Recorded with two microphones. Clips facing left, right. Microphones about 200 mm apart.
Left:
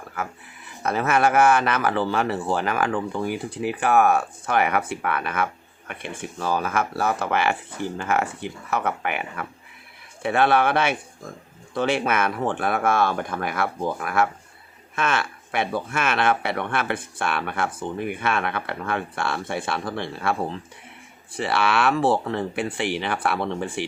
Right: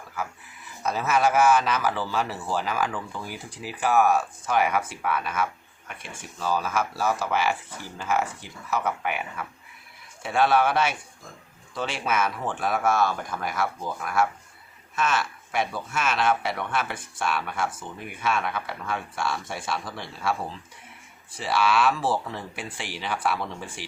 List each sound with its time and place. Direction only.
0.8 s speech: 60° left (ahead or behind)